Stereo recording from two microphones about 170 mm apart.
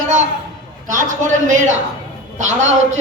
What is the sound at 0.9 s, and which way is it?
A man's voice, 50° right (ahead or behind).